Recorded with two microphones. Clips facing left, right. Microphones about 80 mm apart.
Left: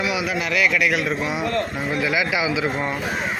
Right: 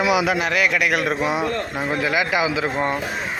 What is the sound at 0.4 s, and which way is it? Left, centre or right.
A man's voice, right.